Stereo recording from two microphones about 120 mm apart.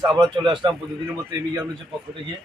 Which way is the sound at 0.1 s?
40° right (ahead or behind).